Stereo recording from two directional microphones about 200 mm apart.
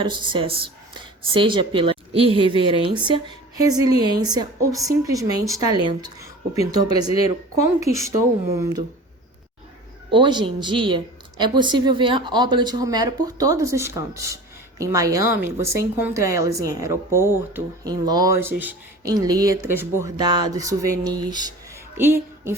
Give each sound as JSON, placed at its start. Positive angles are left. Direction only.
{"t": 0.0, "sound": "speech", "side_deg": -25}
{"t": 7.9, "sound": "speech", "side_deg": -15}
{"t": 10.1, "sound": "speech", "side_deg": -25}
{"t": 21.9, "sound": "a sound", "side_deg": -10}